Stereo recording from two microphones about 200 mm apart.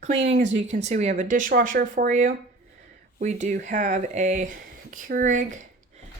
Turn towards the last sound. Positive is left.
turn(degrees=-40)  # may be behind; listen again after turning